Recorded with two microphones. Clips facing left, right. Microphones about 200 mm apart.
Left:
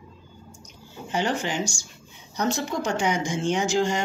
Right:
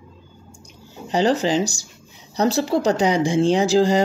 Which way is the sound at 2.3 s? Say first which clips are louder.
Right 7 dB; 35° right (ahead or behind).